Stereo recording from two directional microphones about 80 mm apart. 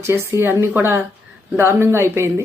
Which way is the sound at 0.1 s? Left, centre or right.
Right.